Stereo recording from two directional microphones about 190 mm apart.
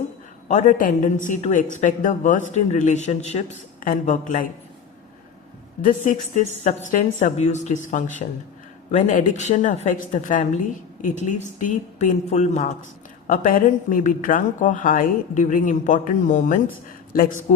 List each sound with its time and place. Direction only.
0.4 s a woman's voice: 40° left (ahead or behind)
5.8 s a woman's voice: 40° left (ahead or behind)